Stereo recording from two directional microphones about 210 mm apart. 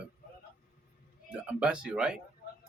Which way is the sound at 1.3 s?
5° right (ahead or behind).